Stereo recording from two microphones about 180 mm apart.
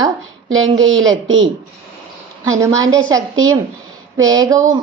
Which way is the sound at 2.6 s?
20° right (ahead or behind).